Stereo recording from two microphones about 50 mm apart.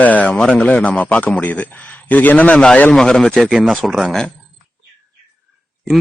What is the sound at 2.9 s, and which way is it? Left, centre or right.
Speech, centre.